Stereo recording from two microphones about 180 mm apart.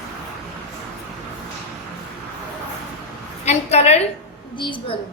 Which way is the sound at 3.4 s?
35° left (ahead or behind).